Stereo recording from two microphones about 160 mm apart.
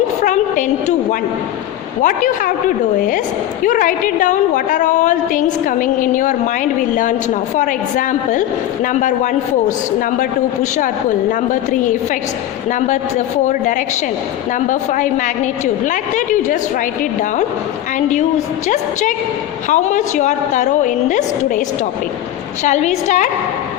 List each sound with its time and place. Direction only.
0.2 s a sound: 50° left (ahead or behind)
2.0 s a woman's voice: 55° left (ahead or behind)
7.5 s a woman's voice: 55° left (ahead or behind)
19.6 s a woman's voice: 50° left (ahead or behind)
22.6 s a woman's voice: 45° left (ahead or behind)